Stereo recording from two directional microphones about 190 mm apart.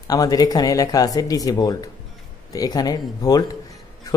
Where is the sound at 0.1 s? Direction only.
20° left (ahead or behind).